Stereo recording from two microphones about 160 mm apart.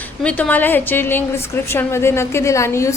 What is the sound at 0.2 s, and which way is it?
A woman's voice, 10° left (ahead or behind).